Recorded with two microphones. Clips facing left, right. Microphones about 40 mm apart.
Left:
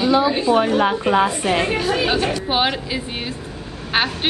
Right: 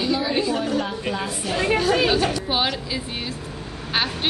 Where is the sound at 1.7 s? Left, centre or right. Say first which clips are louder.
Even; centre.